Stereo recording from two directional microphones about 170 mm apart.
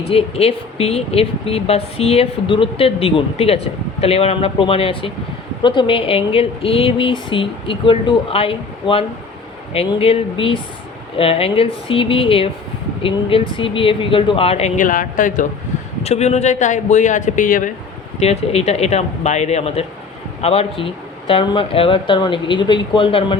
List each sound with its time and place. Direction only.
0.1 s speech: 35° left (ahead or behind); by 15.4 s 50° left (ahead or behind)
16.0 s speech: 40° left (ahead or behind)
18.2 s speech: 40° left (ahead or behind)